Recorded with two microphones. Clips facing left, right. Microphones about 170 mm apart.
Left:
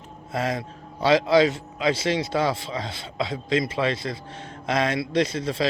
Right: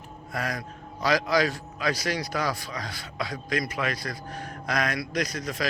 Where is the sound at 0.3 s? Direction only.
25° left (ahead or behind).